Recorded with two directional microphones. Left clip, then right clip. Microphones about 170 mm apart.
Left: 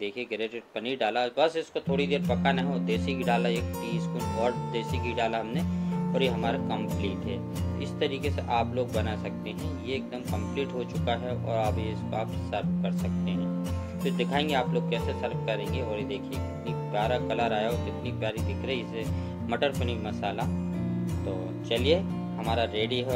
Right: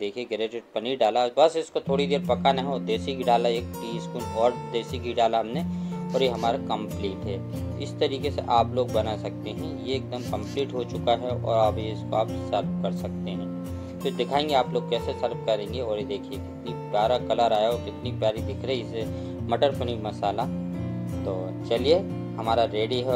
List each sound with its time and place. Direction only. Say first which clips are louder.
0.0 s speech: right 3 dB; 15° right (ahead or behind)
21.6 s speech: right 4 dB; 20° right (ahead or behind)